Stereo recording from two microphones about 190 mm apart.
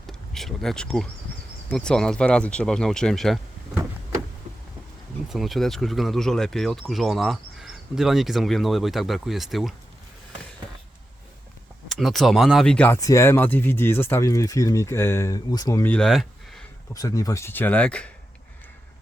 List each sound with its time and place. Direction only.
0.1 s speech: centre (ahead or behind)
5.3 s speech: centre (ahead or behind)
11.9 s speech: centre (ahead or behind)
16.9 s speech: 20° left (ahead or behind)